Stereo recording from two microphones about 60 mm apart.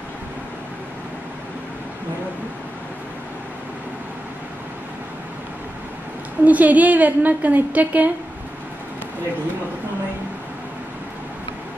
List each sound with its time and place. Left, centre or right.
6.4 s a woman's voice: right